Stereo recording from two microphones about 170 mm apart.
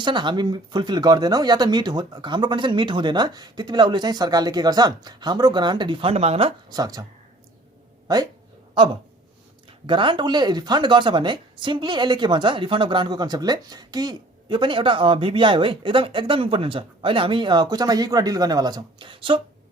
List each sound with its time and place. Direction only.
0.0 s speech: 25° right (ahead or behind)
6.7 s speech: 20° right (ahead or behind)
8.0 s speech: 20° right (ahead or behind)